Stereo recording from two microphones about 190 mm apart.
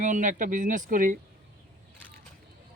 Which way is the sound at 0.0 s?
40° right (ahead or behind).